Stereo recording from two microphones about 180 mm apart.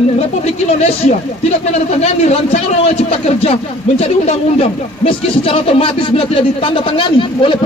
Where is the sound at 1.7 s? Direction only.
35° left (ahead or behind).